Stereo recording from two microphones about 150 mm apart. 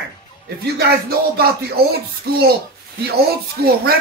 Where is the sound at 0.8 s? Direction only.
90° right.